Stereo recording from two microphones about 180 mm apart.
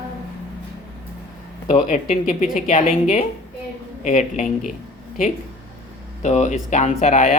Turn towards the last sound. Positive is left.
turn(degrees=40)  # may be behind; listen again after turning